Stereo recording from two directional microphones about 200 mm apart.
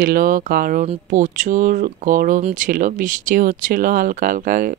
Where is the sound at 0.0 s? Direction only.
45° right (ahead or behind).